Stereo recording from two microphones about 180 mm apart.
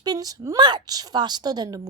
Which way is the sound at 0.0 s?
20° right (ahead or behind).